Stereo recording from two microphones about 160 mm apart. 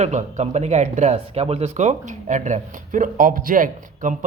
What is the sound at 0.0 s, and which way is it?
Speech, 45° right (ahead or behind).